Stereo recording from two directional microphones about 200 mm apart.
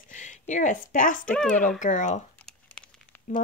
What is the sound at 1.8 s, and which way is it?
Speech, 40° left (ahead or behind).